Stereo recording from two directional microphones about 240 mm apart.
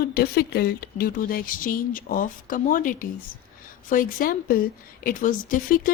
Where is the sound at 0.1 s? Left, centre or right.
Left.